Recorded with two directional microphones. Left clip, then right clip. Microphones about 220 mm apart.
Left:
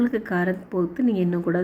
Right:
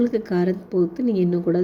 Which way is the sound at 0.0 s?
30° right (ahead or behind).